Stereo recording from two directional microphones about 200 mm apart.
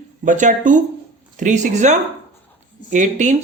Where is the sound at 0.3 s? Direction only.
40° right (ahead or behind).